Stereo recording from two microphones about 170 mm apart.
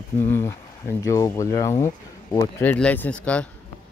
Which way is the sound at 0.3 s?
15° left (ahead or behind).